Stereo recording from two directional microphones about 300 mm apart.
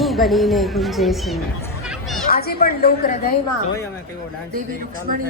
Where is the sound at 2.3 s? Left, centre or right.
Left.